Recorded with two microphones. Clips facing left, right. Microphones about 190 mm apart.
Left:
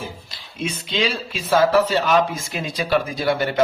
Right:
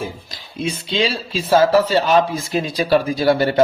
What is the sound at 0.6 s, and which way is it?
A man's voice, 30° right (ahead or behind).